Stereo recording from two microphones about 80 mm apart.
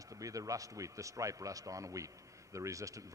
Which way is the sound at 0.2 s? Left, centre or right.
Right.